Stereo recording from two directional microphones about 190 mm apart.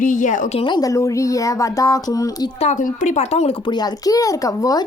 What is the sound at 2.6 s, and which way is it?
A woman's voice, 40° left (ahead or behind).